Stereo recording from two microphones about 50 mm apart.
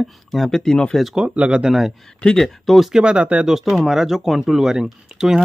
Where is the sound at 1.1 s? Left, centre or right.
Right.